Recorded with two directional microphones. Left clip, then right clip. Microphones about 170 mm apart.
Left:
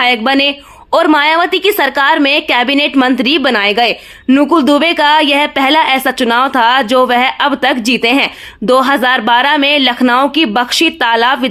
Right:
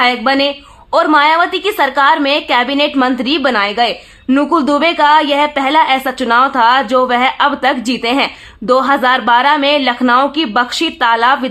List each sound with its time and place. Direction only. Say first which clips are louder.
0.0 s a woman's voice: left 1 dB; 40° left (ahead or behind)